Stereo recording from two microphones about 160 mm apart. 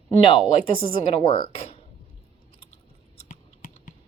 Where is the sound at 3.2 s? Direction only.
50° left (ahead or behind).